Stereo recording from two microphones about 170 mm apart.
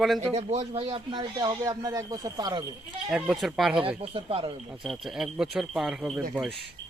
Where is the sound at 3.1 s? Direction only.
5° right (ahead or behind).